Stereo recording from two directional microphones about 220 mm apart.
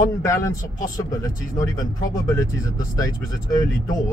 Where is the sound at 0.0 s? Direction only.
15° left (ahead or behind).